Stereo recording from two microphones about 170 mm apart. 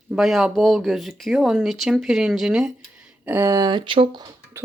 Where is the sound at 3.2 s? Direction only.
15° right (ahead or behind).